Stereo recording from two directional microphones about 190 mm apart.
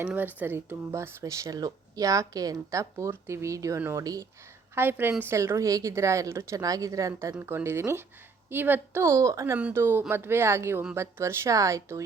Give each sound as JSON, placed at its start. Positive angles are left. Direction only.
{"t": 0.0, "sound": "speech", "side_deg": -10}